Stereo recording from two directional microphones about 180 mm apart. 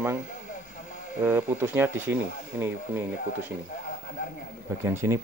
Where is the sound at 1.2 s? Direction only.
10° right (ahead or behind).